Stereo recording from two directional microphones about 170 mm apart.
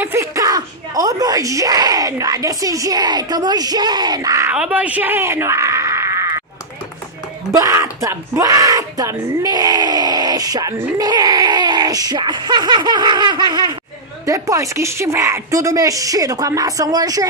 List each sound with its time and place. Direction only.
0.0 s speech: 15° right (ahead or behind)
7.5 s speech: 20° right (ahead or behind)